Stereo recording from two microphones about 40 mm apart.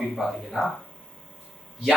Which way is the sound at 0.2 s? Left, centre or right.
Centre.